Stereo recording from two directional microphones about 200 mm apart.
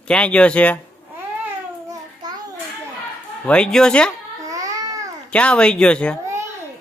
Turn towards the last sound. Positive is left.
turn(degrees=5)  # may be behind; listen again after turning